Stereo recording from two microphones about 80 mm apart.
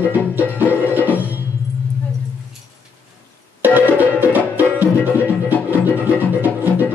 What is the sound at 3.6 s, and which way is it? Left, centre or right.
Music, right.